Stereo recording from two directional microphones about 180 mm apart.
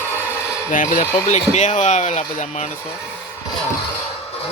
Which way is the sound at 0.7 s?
45° left (ahead or behind).